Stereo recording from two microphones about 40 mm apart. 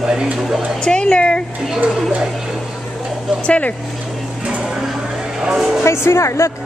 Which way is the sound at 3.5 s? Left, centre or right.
Left.